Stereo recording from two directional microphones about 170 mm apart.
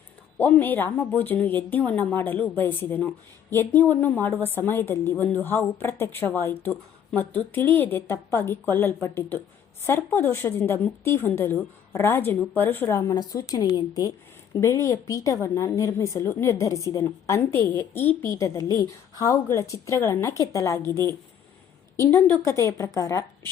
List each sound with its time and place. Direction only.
0.3 s a woman's voice: 10° left (ahead or behind)